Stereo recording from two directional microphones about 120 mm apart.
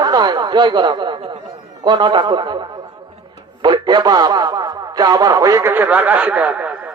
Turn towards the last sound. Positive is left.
turn(degrees=-10)  # may be behind; listen again after turning